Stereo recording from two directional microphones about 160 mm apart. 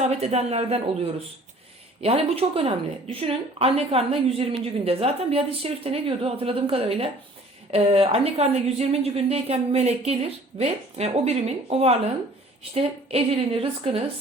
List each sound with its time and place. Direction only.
0.1 s a woman's voice: 40° right (ahead or behind)